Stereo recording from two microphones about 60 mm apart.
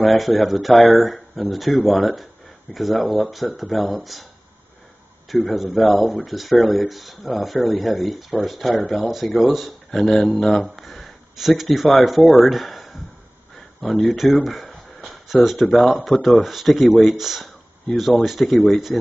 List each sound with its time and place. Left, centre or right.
0.0 s speech: centre
5.5 s speech: centre